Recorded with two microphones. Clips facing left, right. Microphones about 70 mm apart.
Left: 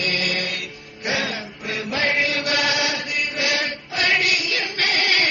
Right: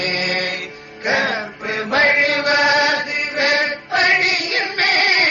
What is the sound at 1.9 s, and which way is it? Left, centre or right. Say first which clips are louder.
Chant: right 7 dB; right.